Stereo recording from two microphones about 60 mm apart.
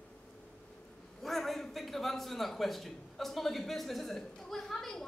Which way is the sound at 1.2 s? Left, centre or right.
Centre.